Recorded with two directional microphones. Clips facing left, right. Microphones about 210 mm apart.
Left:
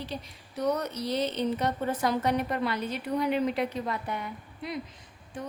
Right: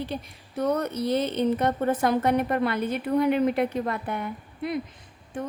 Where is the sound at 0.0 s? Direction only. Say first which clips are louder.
Right 5 dB; 55° right (ahead or behind).